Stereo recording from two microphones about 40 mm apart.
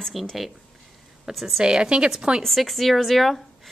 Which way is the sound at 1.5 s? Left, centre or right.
Right.